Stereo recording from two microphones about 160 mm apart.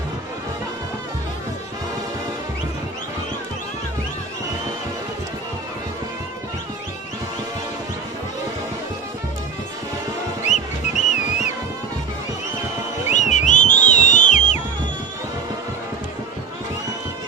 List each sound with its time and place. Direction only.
10.4 s music: 45° left (ahead or behind)
13.1 s music: 50° left (ahead or behind)